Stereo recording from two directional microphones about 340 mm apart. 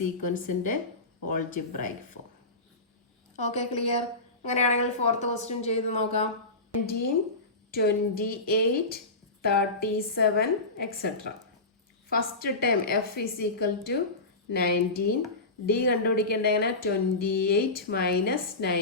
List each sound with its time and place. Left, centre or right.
0.0 s speech: left
3.3 s speech: centre
7.7 s speech: left